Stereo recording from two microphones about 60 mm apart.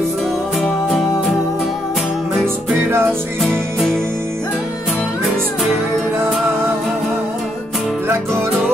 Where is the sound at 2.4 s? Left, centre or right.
Right.